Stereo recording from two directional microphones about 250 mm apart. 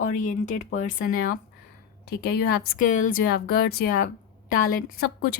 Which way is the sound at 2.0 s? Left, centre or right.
Left.